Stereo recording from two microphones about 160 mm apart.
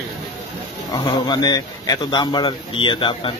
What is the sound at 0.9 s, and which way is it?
A man's voice, 25° left (ahead or behind).